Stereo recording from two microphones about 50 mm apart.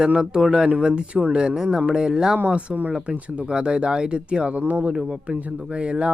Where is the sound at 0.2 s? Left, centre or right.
Centre.